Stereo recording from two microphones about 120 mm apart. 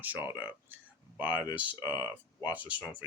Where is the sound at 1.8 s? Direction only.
30° left (ahead or behind).